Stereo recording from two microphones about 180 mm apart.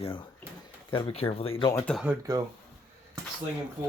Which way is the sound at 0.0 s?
25° left (ahead or behind).